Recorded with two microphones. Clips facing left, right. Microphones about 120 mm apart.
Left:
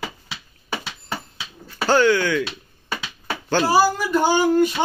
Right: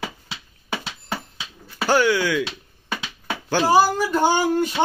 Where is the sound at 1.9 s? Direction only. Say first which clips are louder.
Left 2 dB; 10° right (ahead or behind).